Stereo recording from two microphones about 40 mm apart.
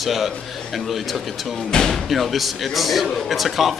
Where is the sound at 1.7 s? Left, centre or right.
Centre.